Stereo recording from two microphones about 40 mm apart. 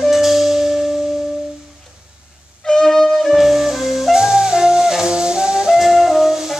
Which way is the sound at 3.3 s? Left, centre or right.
Centre.